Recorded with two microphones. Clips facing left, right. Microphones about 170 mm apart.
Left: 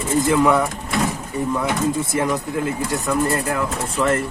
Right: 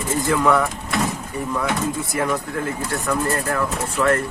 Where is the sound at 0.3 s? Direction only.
20° left (ahead or behind).